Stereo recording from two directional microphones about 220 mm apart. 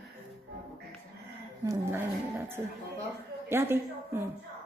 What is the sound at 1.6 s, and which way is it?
Speech, 15° right (ahead or behind).